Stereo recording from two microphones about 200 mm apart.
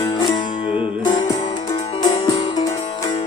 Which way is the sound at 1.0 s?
20° left (ahead or behind).